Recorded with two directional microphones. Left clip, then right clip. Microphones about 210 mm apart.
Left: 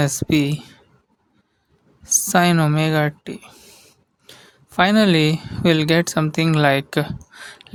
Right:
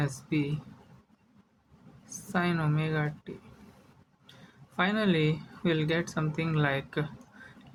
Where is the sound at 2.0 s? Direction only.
55° left (ahead or behind).